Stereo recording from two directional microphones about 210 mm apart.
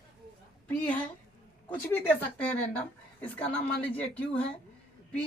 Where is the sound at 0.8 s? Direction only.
5° left (ahead or behind).